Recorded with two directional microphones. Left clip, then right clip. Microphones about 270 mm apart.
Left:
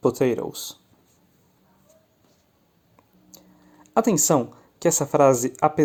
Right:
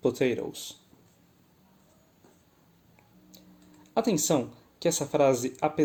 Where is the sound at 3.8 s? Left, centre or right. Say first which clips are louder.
Left 6 dB; left.